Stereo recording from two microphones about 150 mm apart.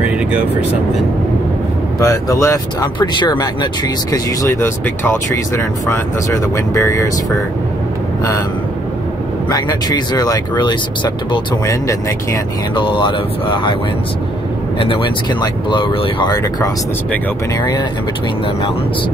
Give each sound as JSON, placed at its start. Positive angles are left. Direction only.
{"t": 2.0, "sound": "speech", "side_deg": 20}
{"t": 9.5, "sound": "speech", "side_deg": 25}
{"t": 12.7, "sound": "speech", "side_deg": 35}
{"t": 14.8, "sound": "speech", "side_deg": 35}